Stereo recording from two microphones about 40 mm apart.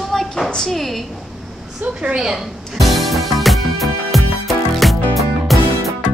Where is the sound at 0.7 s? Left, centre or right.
Centre.